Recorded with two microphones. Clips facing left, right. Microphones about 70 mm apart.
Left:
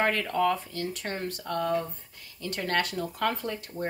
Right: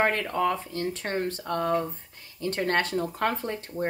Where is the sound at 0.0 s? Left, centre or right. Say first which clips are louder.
Right 1 dB; right.